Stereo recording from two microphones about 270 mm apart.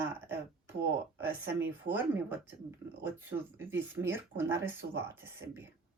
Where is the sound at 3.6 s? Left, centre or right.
Centre.